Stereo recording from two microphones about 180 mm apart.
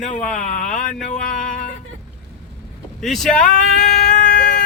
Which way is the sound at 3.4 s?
45° left (ahead or behind).